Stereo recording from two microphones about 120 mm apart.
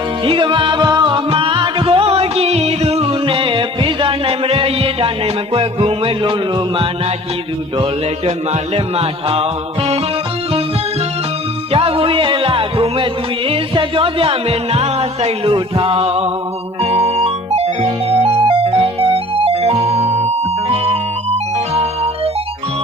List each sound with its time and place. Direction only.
0.3 s music: 45° right (ahead or behind)
8.7 s music: 55° right (ahead or behind)
11.7 s music: 50° right (ahead or behind)
15.5 s music: 45° right (ahead or behind)
18.9 s music: 55° right (ahead or behind)